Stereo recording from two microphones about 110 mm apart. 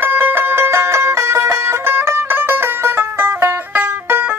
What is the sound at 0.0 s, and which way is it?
Music, 20° right (ahead or behind).